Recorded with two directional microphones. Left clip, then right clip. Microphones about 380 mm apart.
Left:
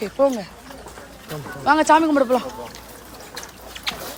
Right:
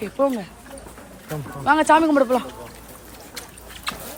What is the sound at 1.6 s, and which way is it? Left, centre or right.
Speech, centre.